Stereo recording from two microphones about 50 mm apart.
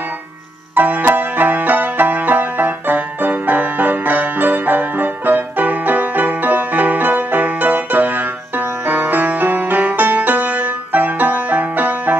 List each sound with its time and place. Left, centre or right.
0.7 s music: right